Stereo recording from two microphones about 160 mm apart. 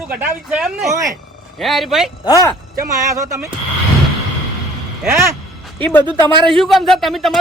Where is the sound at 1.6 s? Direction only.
Centre (ahead or behind).